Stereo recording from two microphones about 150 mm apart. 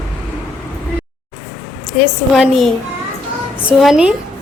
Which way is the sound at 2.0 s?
Centre (ahead or behind).